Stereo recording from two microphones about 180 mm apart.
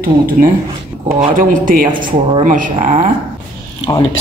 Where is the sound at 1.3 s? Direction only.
50° right (ahead or behind).